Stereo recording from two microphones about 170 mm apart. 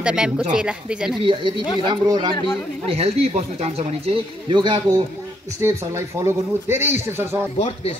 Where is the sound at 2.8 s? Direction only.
35° right (ahead or behind); by 7.4 s 15° right (ahead or behind).